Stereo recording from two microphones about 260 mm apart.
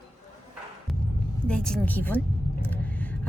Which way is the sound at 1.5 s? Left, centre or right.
Centre.